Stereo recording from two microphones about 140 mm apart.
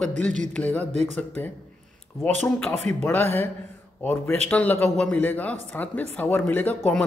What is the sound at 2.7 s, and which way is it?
Speech, 55° right (ahead or behind).